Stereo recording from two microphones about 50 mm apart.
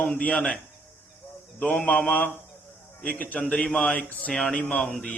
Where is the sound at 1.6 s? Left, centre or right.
Left.